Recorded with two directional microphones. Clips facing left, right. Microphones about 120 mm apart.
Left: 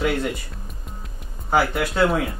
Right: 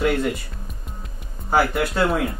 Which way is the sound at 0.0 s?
Centre (ahead or behind).